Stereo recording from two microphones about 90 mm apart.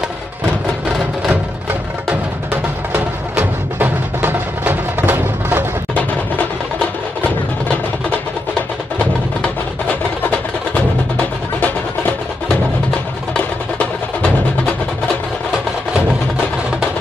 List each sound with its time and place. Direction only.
2.5 s music: 20° right (ahead or behind)
5.9 s music: 15° left (ahead or behind)